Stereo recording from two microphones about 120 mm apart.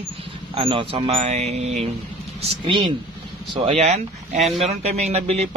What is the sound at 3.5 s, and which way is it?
Speech, 60° right (ahead or behind).